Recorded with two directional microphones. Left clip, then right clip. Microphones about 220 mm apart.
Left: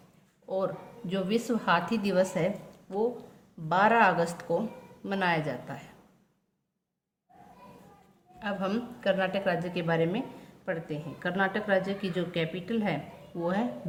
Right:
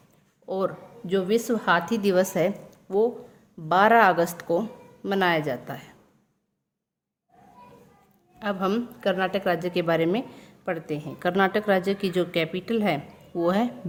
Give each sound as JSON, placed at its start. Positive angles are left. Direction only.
{"t": 0.4, "sound": "a woman's voice", "side_deg": -50}
{"t": 3.7, "sound": "a woman's voice", "side_deg": -45}
{"t": 8.4, "sound": "a woman's voice", "side_deg": -50}